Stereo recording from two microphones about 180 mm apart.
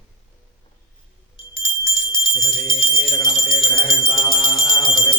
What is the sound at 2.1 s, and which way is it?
Jingle bell, 25° left (ahead or behind).